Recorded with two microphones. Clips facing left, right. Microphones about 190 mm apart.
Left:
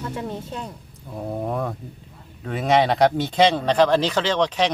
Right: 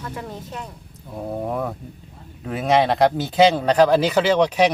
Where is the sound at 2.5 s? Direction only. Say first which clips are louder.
Right 1 dB; centre (ahead or behind).